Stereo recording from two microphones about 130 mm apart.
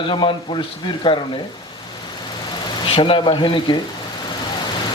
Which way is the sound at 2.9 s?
45° left (ahead or behind).